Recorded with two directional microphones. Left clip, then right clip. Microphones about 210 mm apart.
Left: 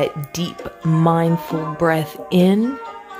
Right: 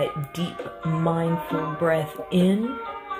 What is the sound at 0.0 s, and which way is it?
Speech, 35° left (ahead or behind).